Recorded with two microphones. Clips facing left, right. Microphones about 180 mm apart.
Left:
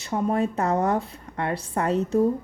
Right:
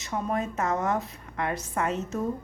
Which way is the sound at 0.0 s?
30° left (ahead or behind).